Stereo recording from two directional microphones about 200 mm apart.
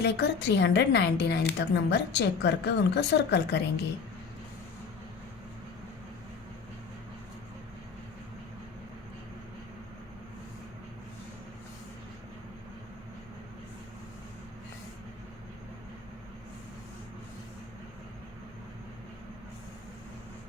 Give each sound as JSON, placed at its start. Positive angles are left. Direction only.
{"t": 0.0, "sound": "a woman's voice", "side_deg": 55}